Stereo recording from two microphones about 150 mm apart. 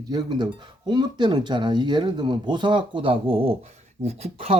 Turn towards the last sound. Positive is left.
turn(degrees=-45)  # may be behind; listen again after turning